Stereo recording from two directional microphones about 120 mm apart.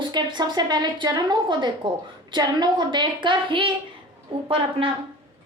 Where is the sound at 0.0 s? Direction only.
35° right (ahead or behind).